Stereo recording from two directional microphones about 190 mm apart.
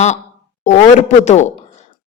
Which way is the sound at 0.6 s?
40° left (ahead or behind).